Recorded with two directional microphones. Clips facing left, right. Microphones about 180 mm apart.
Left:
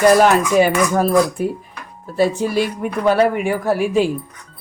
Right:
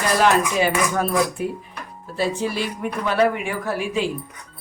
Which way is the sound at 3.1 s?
40° left (ahead or behind).